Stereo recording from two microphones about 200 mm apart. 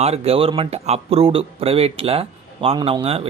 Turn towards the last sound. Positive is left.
turn(degrees=-30)  # may be behind; listen again after turning